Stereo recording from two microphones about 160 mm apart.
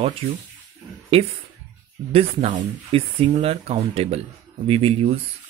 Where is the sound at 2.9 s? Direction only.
35° right (ahead or behind).